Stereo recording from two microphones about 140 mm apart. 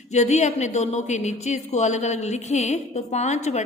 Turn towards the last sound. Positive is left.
turn(degrees=55)  # may be behind; listen again after turning